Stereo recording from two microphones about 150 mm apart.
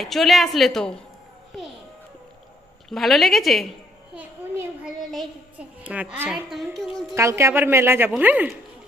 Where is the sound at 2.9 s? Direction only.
Centre (ahead or behind).